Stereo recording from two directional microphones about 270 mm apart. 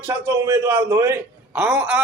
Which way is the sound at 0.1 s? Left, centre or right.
Centre.